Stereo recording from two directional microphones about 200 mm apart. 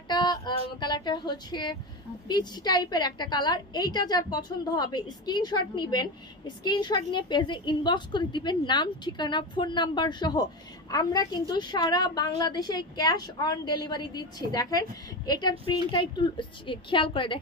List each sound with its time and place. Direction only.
0.1 s a woman's voice: 20° left (ahead or behind)